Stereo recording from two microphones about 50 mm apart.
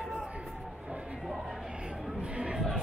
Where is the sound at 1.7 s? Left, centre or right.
Centre.